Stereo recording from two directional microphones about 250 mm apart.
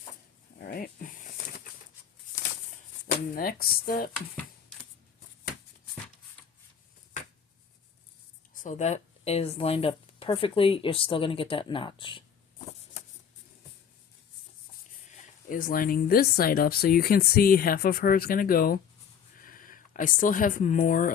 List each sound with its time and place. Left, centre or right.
0.6 s dog: left
3.3 s speech: left
8.5 s speech: left
15.1 s speech: left